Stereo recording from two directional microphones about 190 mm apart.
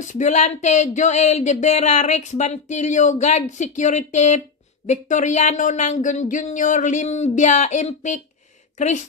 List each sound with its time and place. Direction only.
0.0 s speech: 40° left (ahead or behind)